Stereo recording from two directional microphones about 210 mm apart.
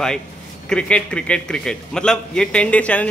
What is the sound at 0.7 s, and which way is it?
A man's voice, 5° left (ahead or behind).